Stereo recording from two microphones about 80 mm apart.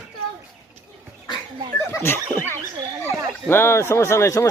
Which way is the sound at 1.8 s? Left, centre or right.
Left.